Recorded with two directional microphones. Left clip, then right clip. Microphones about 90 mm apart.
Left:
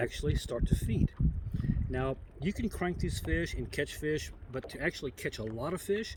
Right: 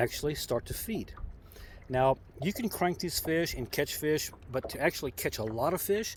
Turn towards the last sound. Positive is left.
turn(degrees=35)  # may be behind; listen again after turning